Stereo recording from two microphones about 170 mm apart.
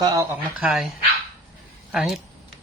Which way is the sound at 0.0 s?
20° right (ahead or behind).